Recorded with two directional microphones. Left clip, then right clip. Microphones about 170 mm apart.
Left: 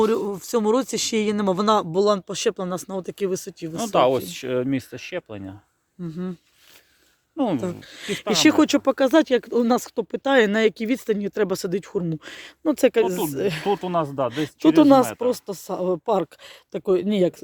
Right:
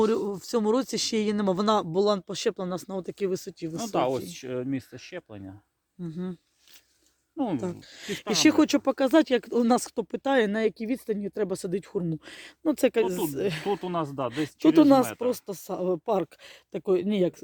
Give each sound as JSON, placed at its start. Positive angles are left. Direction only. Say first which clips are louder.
{"t": 0.0, "sound": "speech", "louder": "left 4 dB", "side_deg": 0}
{"t": 3.8, "sound": "speech", "louder": "left 8 dB", "side_deg": 60}
{"t": 6.0, "sound": "speech", "louder": "left 4 dB", "side_deg": 0}
{"t": 7.3, "sound": "speech", "louder": "left 6 dB", "side_deg": 65}
{"t": 7.6, "sound": "speech", "louder": "left 5 dB", "side_deg": 5}
{"t": 10.3, "sound": "speech", "louder": "left 7 dB", "side_deg": 15}
{"t": 13.8, "sound": "speech", "louder": "left 7 dB", "side_deg": 40}
{"t": 14.3, "sound": "speech", "louder": "left 4 dB", "side_deg": 0}
{"t": 15.0, "sound": "speech", "louder": "left 5 dB", "side_deg": 30}
{"t": 15.3, "sound": "speech", "louder": "left 5 dB", "side_deg": 0}